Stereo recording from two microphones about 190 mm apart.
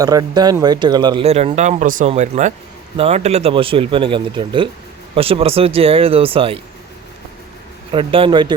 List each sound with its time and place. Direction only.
0.0 s speech: 20° right (ahead or behind)
7.9 s speech: 30° right (ahead or behind)